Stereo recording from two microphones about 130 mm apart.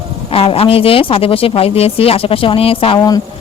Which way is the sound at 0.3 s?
50° left (ahead or behind).